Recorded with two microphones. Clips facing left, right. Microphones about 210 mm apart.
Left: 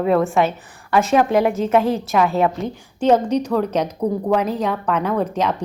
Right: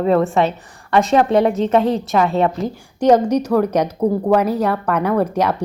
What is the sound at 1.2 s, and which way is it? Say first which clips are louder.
Speech: right 2 dB; 30° right (ahead or behind).